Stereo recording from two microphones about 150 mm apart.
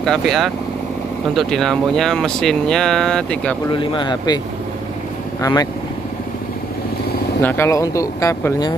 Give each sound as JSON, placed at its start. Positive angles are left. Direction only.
{"t": 0.0, "sound": "speech", "side_deg": 0}
{"t": 3.7, "sound": "speech", "side_deg": 35}
{"t": 5.4, "sound": "speech", "side_deg": 25}
{"t": 7.4, "sound": "speech", "side_deg": 15}